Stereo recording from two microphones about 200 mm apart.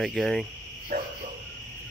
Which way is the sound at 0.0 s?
Centre (ahead or behind).